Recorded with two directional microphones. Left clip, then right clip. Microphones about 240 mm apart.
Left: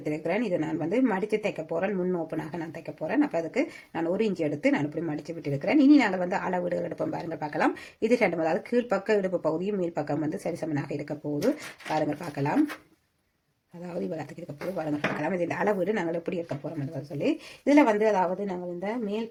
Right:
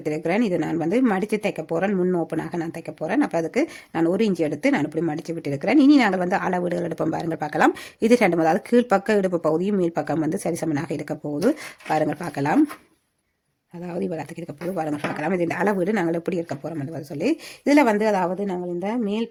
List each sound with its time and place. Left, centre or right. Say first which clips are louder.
0.0 s speech: right 6 dB; right
13.8 s speech: right 5 dB; right